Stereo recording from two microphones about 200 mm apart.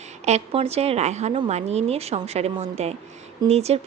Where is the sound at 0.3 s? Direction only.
30° right (ahead or behind).